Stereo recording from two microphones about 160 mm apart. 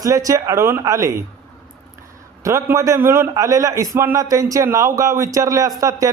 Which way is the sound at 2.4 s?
20° right (ahead or behind).